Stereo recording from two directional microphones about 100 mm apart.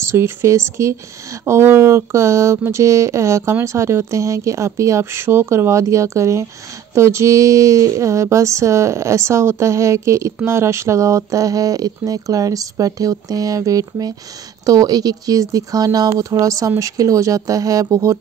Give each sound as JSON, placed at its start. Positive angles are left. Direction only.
{"t": 0.1, "sound": "speech", "side_deg": -25}